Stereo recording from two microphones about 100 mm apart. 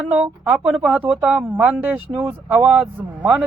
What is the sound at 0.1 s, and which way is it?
Speech, 10° right (ahead or behind).